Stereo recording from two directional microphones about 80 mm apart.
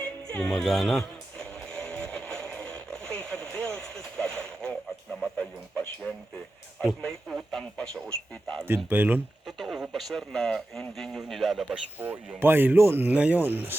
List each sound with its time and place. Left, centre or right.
0.0 s music: centre
5.1 s a man's voice: centre
8.6 s speech: right
9.6 s speech: centre
11.7 s speech: centre
13.1 s speech: centre